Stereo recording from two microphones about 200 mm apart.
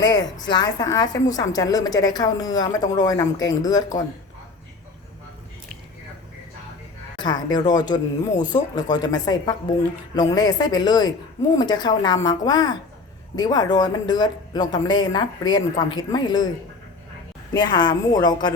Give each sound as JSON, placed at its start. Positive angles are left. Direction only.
{"t": 0.0, "sound": "a woman's voice", "side_deg": 20}
{"t": 7.2, "sound": "a woman's voice", "side_deg": 20}
{"t": 17.5, "sound": "a woman's voice", "side_deg": 20}